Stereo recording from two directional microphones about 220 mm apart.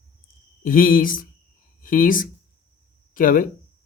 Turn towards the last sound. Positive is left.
turn(degrees=40)  # may be behind; listen again after turning